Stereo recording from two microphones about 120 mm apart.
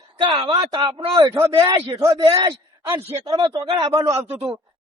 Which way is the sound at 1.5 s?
45° right (ahead or behind).